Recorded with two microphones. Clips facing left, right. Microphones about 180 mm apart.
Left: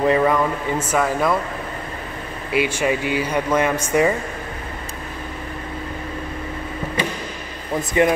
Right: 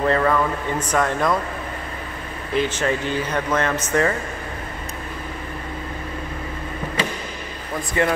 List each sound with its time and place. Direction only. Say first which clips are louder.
0.0 s speech: left 2 dB; 15° left (ahead or behind)
2.5 s speech: left 2 dB; 10° left (ahead or behind)
8.0 s speech: left 4 dB; 20° left (ahead or behind)